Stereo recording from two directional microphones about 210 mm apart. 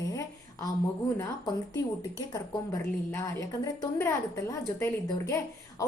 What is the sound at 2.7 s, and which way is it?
A woman's voice, 15° left (ahead or behind).